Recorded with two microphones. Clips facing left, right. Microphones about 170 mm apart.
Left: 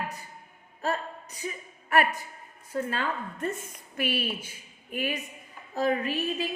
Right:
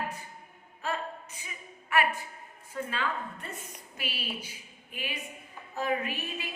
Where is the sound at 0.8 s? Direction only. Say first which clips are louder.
Left 4 dB; 40° left (ahead or behind).